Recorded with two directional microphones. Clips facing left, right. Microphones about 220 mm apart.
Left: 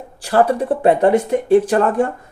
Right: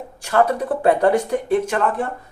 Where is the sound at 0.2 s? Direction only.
35° left (ahead or behind).